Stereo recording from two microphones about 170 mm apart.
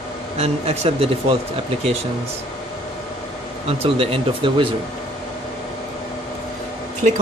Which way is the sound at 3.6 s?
35° right (ahead or behind).